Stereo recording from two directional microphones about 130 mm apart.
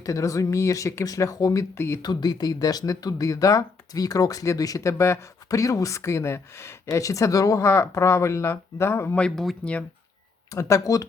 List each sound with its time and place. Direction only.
0.0 s speech: 25° left (ahead or behind)
2.0 s speech: 30° left (ahead or behind)
9.2 s speech: centre (ahead or behind)
10.5 s speech: 25° left (ahead or behind)